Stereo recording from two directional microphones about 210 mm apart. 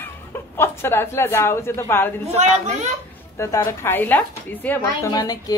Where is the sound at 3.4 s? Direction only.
15° left (ahead or behind).